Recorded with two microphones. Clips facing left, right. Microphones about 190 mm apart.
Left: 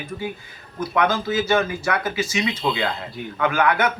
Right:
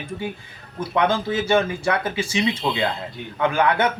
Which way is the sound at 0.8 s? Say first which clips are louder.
Even; 30° right (ahead or behind).